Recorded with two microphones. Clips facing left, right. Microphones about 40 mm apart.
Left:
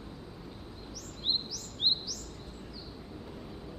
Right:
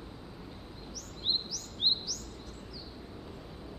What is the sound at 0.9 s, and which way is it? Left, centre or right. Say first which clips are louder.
Bird: even; centre.